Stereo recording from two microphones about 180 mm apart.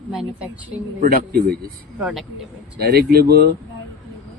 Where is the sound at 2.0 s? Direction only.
5° right (ahead or behind).